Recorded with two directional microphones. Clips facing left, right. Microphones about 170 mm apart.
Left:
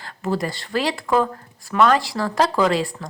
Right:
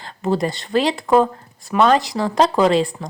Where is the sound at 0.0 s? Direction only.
25° right (ahead or behind).